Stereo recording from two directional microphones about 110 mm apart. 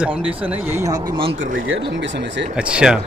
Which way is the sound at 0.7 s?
30° right (ahead or behind).